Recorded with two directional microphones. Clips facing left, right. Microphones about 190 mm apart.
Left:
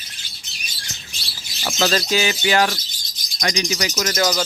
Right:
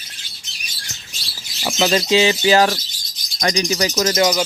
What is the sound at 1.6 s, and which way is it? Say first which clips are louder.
Speech: right 3 dB; 15° right (ahead or behind).